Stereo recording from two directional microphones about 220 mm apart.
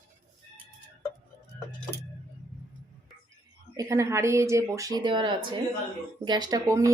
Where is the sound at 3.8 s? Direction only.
15° right (ahead or behind).